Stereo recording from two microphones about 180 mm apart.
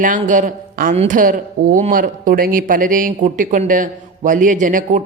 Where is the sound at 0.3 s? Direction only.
45° right (ahead or behind).